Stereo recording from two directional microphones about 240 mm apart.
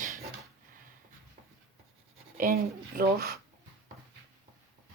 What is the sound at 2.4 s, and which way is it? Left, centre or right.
Speech, right.